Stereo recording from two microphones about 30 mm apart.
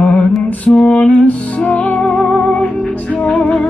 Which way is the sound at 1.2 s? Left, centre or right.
Left.